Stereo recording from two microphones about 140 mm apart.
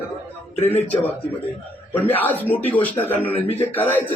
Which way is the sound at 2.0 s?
15° left (ahead or behind).